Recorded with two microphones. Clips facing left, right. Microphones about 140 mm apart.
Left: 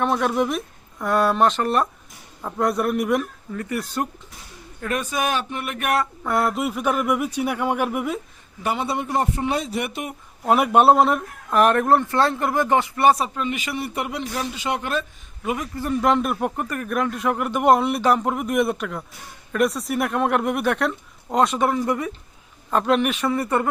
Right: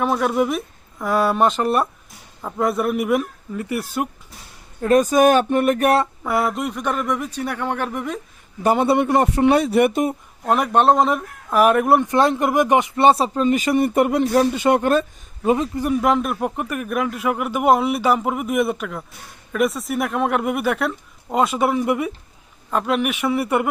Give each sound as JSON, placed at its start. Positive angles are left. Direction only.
{"t": 0.0, "sound": "a man's voice", "side_deg": -5}
{"t": 4.8, "sound": "speech", "side_deg": -35}
{"t": 6.2, "sound": "speech", "side_deg": 0}
{"t": 8.6, "sound": "a man's voice", "side_deg": -50}
{"t": 10.4, "sound": "speech", "side_deg": 5}
{"t": 15.4, "sound": "speech", "side_deg": -25}
{"t": 15.8, "sound": "a man's voice", "side_deg": -10}